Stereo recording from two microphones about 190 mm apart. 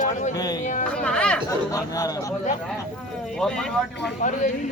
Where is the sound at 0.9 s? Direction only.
5° left (ahead or behind).